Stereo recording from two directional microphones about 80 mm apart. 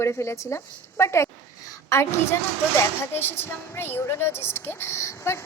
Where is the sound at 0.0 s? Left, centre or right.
Left.